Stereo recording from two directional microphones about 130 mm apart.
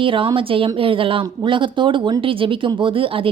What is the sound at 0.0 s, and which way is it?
A woman's voice, 40° right (ahead or behind).